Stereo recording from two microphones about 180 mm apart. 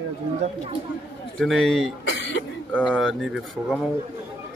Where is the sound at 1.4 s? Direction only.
Centre (ahead or behind).